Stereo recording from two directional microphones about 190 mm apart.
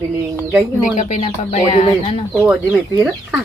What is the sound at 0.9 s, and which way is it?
Speech, 35° left (ahead or behind).